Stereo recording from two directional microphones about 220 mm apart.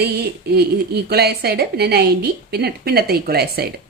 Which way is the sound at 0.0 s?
45° right (ahead or behind).